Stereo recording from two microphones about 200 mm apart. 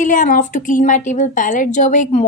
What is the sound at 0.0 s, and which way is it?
A woman's voice, 40° left (ahead or behind).